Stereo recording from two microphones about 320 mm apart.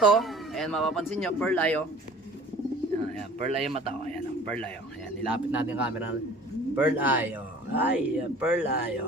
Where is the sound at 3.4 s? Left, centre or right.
Centre.